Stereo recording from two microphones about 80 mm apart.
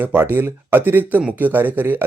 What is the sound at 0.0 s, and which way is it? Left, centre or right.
Speech, right.